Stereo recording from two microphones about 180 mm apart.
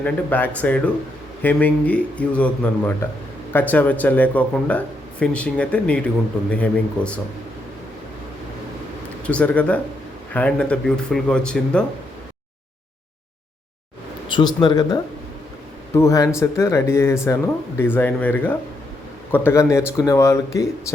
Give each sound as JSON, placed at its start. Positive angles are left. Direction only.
{"t": 0.0, "sound": "a man's voice", "side_deg": 10}
{"t": 9.2, "sound": "a man's voice", "side_deg": 5}
{"t": 14.3, "sound": "speech", "side_deg": 25}
{"t": 16.0, "sound": "a man's voice", "side_deg": 15}